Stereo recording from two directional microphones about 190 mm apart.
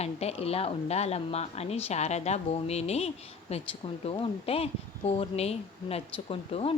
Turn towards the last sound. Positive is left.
turn(degrees=30)  # may be behind; listen again after turning